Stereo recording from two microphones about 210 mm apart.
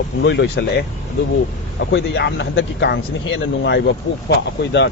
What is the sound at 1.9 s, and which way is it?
Speech, 60° left (ahead or behind).